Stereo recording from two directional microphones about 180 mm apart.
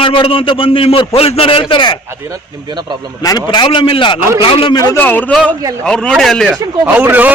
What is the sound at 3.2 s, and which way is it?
A man's voice, 20° left (ahead or behind).